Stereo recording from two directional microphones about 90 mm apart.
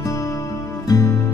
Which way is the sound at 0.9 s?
40° left (ahead or behind).